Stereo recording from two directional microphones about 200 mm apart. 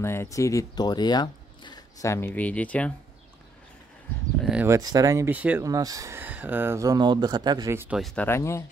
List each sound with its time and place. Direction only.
0.0 s speech: 10° left (ahead or behind)
4.4 s a sound: 5° right (ahead or behind)
4.6 s speech: 15° right (ahead or behind)
8.0 s speech: 5° left (ahead or behind)